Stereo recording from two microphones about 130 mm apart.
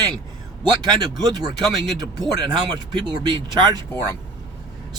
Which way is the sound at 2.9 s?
35° right (ahead or behind).